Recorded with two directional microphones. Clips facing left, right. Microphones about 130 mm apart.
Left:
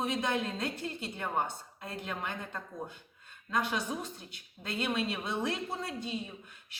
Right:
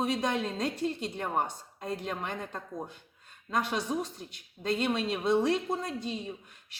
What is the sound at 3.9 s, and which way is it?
Speech, 30° right (ahead or behind).